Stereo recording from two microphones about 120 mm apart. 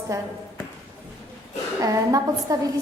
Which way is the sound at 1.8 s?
30° right (ahead or behind).